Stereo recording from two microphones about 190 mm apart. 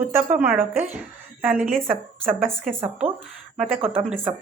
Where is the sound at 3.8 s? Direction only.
30° right (ahead or behind).